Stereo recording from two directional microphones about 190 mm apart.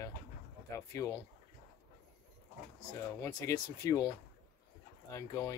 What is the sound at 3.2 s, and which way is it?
Speech, 20° left (ahead or behind).